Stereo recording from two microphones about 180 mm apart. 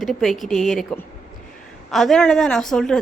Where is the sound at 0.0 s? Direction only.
Centre (ahead or behind).